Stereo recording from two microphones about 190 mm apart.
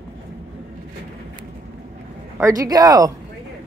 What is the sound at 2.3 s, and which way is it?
Speech, 15° right (ahead or behind).